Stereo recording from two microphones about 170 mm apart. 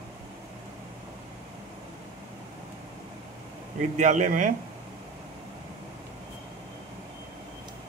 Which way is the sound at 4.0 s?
45° right (ahead or behind).